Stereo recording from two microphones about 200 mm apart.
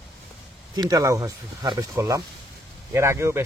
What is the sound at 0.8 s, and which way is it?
Speech, 20° right (ahead or behind).